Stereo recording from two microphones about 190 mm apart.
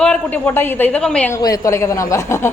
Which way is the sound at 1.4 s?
20° left (ahead or behind).